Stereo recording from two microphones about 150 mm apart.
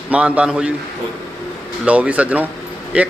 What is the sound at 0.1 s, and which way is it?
Speech, 10° right (ahead or behind).